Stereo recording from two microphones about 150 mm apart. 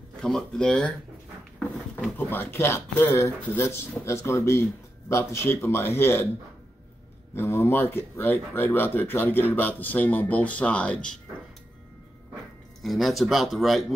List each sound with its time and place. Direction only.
0.2 s speech: centre (ahead or behind)
1.6 s a sound: centre (ahead or behind)
2.1 s speech: 15° left (ahead or behind)
7.3 s speech: 15° left (ahead or behind)
12.8 s speech: centre (ahead or behind)